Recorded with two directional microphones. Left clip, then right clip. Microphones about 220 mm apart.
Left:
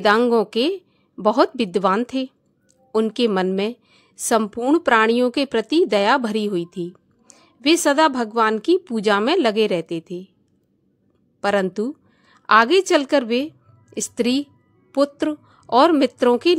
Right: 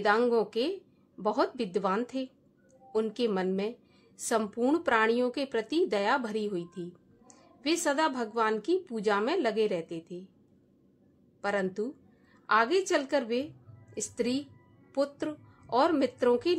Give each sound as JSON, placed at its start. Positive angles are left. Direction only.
{"t": 0.0, "sound": "a woman's voice", "side_deg": 40}
{"t": 11.4, "sound": "a woman's voice", "side_deg": 40}